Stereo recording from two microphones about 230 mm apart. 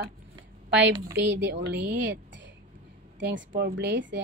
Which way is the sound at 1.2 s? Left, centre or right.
Right.